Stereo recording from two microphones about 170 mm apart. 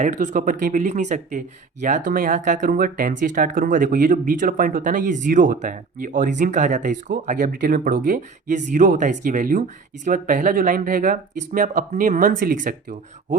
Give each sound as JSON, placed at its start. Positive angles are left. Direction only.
{"t": 0.0, "sound": "speech", "side_deg": -45}